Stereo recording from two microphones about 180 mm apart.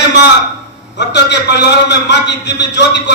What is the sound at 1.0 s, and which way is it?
A man's voice, 75° left (ahead or behind).